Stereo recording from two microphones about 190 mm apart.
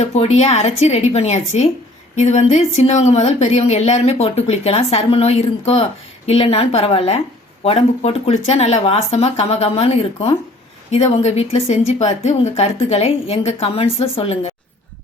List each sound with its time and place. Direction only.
0.0 s a woman's voice: 35° left (ahead or behind)